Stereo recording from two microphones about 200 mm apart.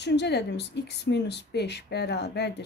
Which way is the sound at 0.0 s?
60° left (ahead or behind).